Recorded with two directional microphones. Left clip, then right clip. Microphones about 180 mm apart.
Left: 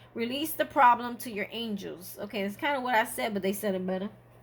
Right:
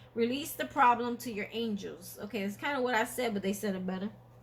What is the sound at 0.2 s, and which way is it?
A woman's voice, 40° left (ahead or behind).